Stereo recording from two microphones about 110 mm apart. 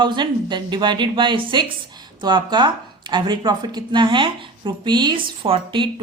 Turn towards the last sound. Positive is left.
turn(degrees=-50)  # may be behind; listen again after turning